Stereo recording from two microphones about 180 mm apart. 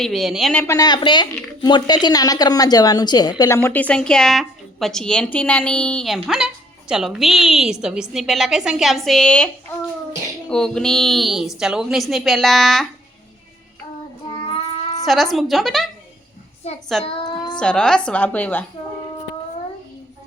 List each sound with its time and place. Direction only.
0.0 s speech: centre (ahead or behind)
0.7 s a woman's voice: 20° left (ahead or behind); by 12.9 s centre (ahead or behind)
14.3 s child singing: 30° left (ahead or behind)
15.0 s speech: centre (ahead or behind)
16.9 s speech: centre (ahead or behind)
17.2 s a sound: 25° left (ahead or behind)
17.6 s a woman's voice: 5° left (ahead or behind)